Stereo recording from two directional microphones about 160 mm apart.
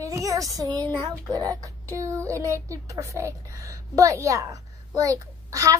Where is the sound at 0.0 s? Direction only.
20° right (ahead or behind).